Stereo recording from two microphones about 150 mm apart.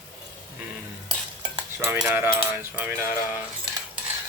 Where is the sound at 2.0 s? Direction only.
15° right (ahead or behind).